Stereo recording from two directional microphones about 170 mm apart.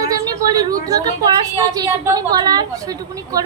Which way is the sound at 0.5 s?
20° right (ahead or behind).